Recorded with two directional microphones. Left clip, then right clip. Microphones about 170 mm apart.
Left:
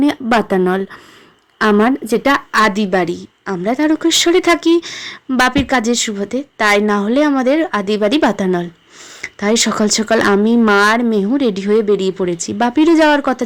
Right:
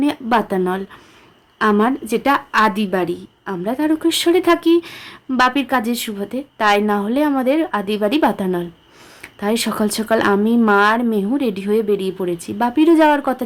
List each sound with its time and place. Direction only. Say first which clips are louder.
0.0 s a woman's voice: left 3 dB; 30° left (ahead or behind)